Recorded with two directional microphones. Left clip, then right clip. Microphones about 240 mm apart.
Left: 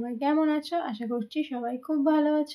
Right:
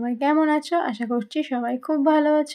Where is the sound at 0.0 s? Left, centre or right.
Right.